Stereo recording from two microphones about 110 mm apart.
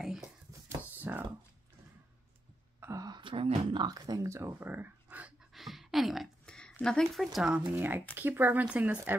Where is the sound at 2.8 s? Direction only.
30° right (ahead or behind).